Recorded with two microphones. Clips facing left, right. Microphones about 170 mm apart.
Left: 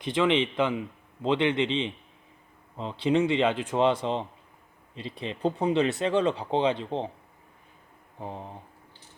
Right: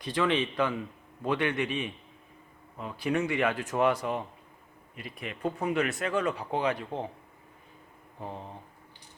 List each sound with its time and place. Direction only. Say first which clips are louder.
0.0 s speech: left 4 dB; 20° left (ahead or behind)
8.2 s speech: left 2 dB; 15° left (ahead or behind)